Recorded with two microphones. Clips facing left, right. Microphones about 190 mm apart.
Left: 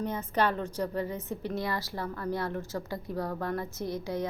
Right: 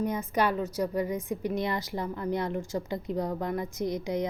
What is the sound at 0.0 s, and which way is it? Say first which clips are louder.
A woman's voice: right 1 dB; 10° right (ahead or behind).